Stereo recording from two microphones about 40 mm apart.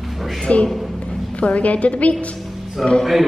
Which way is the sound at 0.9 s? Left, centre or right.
Left.